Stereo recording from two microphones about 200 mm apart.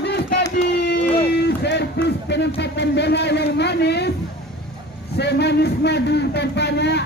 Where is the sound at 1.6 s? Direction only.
60° left (ahead or behind).